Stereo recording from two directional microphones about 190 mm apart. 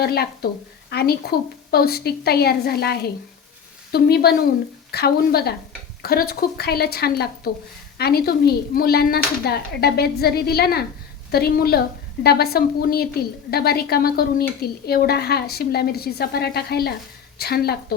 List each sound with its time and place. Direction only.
0.0 s a woman's voice: 55° left (ahead or behind)